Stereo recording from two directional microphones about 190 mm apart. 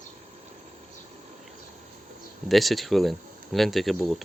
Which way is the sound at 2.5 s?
Centre (ahead or behind).